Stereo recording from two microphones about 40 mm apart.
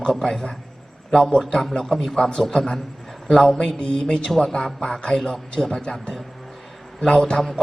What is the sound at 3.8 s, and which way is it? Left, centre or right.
A man's voice, left.